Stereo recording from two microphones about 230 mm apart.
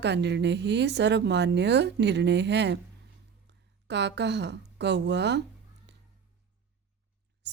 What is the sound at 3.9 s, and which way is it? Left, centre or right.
Speech, right.